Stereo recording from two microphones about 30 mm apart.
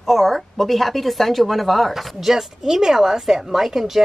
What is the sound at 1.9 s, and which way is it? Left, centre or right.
Speech, centre.